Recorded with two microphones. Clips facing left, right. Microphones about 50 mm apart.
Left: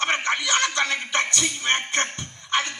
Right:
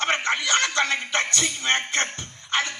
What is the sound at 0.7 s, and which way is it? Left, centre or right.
Speech, right.